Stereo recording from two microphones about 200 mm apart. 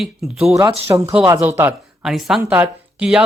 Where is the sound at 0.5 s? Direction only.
15° right (ahead or behind).